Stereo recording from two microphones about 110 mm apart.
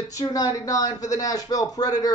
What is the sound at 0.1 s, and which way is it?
A man's voice, 30° left (ahead or behind).